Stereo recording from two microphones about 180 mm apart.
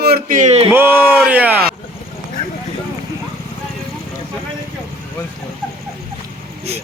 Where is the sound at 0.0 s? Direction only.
55° right (ahead or behind); by 0.7 s 40° right (ahead or behind).